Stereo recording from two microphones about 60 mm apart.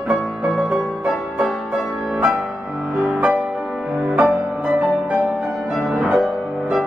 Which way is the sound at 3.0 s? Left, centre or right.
Right.